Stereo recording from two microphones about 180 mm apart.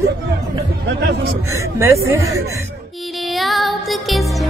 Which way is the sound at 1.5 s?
15° right (ahead or behind).